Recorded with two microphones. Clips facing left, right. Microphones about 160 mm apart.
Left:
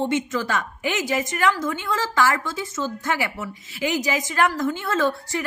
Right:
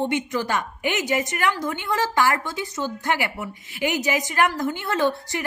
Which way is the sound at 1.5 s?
20° right (ahead or behind).